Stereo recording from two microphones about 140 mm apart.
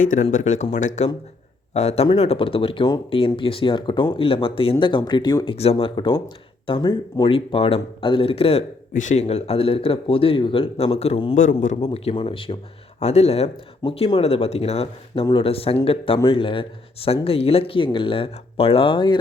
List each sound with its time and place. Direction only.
0.0 s speech: 70° left (ahead or behind); by 5.5 s 30° left (ahead or behind)
5.5 s speech: 45° left (ahead or behind)
8.9 s speech: 65° left (ahead or behind); by 11.3 s 45° left (ahead or behind)
11.6 s speech: 60° left (ahead or behind)
11.9 s speech: 40° left (ahead or behind)
13.0 s speech: 50° left (ahead or behind); by 19.2 s 35° left (ahead or behind)